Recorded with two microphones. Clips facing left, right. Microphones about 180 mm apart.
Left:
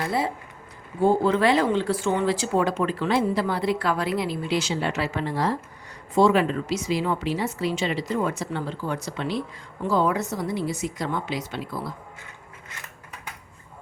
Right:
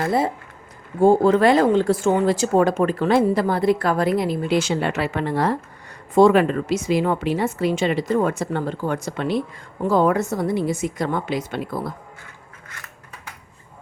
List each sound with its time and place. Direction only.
0.0 s speech: 45° right (ahead or behind)